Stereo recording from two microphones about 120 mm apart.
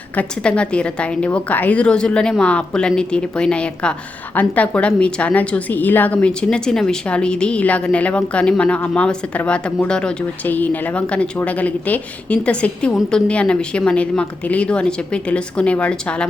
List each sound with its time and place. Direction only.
0.2 s a woman's voice: 10° left (ahead or behind)